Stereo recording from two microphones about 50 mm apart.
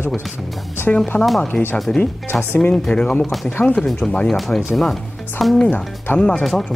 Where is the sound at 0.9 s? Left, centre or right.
Centre.